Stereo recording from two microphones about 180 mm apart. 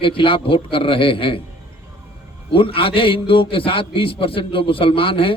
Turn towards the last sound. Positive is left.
turn(degrees=30)  # may be behind; listen again after turning